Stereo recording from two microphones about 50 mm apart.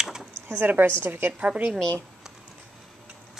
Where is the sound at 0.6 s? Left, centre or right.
Right.